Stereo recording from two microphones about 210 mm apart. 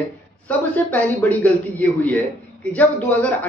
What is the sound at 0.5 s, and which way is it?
A man's voice, 5° left (ahead or behind).